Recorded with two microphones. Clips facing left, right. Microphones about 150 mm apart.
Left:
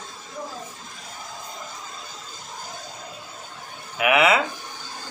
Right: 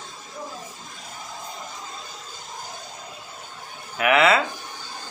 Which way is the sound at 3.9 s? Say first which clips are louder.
Right 1 dB; 10° left (ahead or behind).